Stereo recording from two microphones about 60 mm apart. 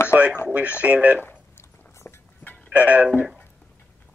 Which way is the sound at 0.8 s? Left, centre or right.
Right.